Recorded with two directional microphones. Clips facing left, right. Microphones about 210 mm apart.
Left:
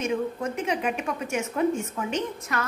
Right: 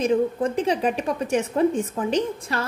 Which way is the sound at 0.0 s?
30° right (ahead or behind).